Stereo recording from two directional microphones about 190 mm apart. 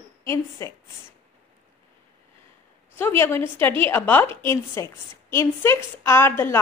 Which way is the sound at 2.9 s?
10° left (ahead or behind).